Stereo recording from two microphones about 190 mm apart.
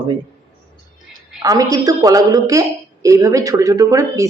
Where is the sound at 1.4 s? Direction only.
20° right (ahead or behind).